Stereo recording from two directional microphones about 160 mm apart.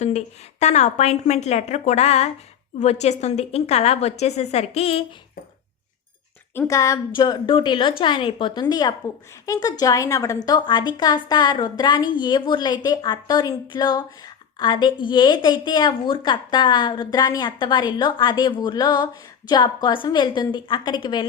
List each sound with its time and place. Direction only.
0.0 s a woman's voice: 45° left (ahead or behind)
6.5 s a woman's voice: 15° left (ahead or behind)